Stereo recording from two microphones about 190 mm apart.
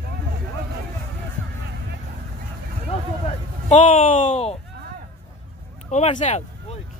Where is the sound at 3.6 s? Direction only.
40° left (ahead or behind).